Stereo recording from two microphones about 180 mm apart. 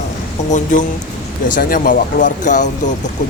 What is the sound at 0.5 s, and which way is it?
A man's voice, 45° left (ahead or behind).